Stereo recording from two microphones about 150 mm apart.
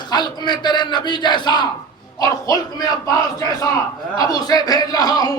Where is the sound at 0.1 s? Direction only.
30° left (ahead or behind).